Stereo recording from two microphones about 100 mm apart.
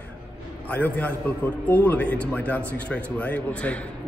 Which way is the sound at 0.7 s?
15° left (ahead or behind).